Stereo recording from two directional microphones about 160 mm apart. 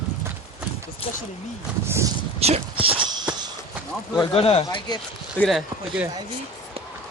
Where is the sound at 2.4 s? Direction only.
40° right (ahead or behind).